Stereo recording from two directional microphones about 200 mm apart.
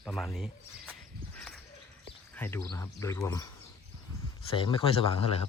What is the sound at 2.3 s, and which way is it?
Speech, 10° left (ahead or behind).